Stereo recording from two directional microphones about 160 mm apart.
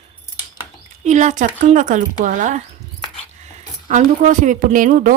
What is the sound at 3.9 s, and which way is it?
Speech, 50° right (ahead or behind).